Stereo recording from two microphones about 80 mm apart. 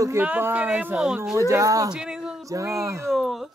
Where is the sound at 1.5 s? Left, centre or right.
Right.